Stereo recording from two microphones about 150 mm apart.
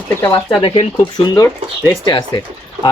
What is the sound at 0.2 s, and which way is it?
Speech, 20° left (ahead or behind).